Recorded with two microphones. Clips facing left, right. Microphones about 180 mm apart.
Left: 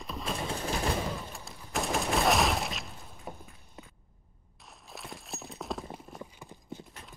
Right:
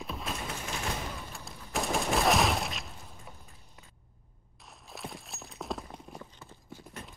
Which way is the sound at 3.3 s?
50° left (ahead or behind).